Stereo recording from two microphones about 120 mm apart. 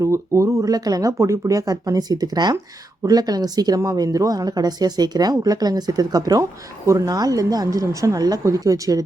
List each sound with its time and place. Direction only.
0.0 s speech: 25° right (ahead or behind)